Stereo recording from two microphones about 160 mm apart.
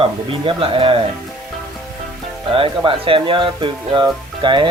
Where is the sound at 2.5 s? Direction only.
35° right (ahead or behind).